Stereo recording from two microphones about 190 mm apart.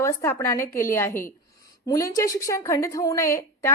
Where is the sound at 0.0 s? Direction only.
15° left (ahead or behind).